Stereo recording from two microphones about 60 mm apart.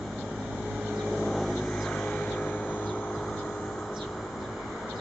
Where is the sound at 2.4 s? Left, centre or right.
Left.